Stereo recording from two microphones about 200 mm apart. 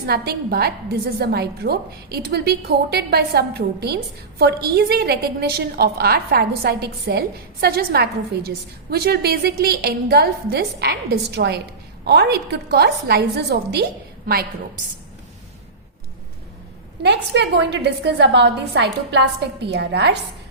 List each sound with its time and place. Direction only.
0.0 s a woman's voice: 50° right (ahead or behind)
17.0 s a woman's voice: 60° right (ahead or behind)